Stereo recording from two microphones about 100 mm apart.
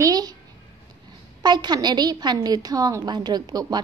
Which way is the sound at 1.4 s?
45° right (ahead or behind).